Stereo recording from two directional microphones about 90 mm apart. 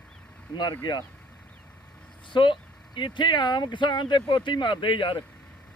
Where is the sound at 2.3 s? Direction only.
65° left (ahead or behind).